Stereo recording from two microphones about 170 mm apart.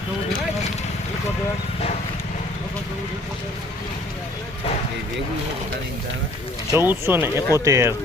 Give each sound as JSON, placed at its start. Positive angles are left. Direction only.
{"t": 6.7, "sound": "speech", "side_deg": -15}